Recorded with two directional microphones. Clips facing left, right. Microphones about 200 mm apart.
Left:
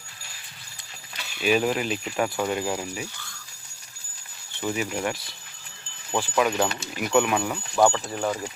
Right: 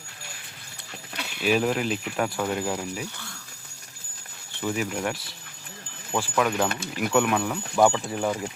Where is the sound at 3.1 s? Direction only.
60° right (ahead or behind).